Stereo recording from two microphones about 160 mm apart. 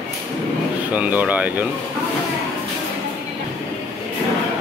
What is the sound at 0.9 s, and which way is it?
Speech, 10° right (ahead or behind).